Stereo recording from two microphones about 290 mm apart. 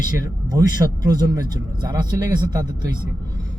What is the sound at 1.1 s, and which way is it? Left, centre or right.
Speech, centre.